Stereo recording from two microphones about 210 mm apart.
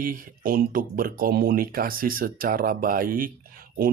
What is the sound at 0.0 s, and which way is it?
Speech, 40° right (ahead or behind).